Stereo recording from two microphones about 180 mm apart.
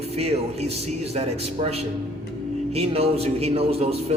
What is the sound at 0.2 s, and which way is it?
A man's voice, 35° right (ahead or behind).